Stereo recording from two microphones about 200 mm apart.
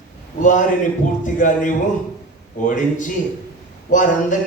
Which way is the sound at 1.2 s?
40° left (ahead or behind).